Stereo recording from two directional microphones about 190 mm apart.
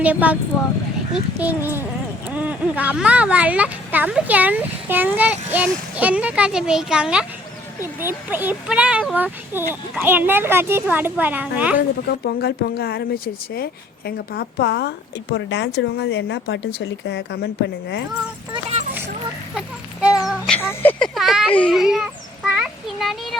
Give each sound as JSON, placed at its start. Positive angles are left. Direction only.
{"t": 0.0, "sound": "speech", "side_deg": -5}
{"t": 1.4, "sound": "speech", "side_deg": -10}
{"t": 12.2, "sound": "a woman's voice", "side_deg": 60}
{"t": 18.5, "sound": "a sound", "side_deg": -35}
{"t": 20.6, "sound": "speech", "side_deg": 10}
{"t": 21.2, "sound": "a child's voice", "side_deg": 0}